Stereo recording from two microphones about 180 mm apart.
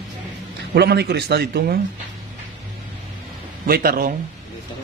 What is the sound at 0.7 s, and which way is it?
A man's voice, 65° right (ahead or behind).